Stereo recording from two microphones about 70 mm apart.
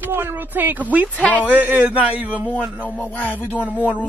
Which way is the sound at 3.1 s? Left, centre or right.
Left.